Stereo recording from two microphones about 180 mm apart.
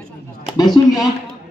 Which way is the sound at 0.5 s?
20° left (ahead or behind).